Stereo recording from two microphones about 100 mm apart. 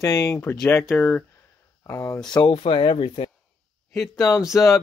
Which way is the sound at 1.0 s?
15° left (ahead or behind).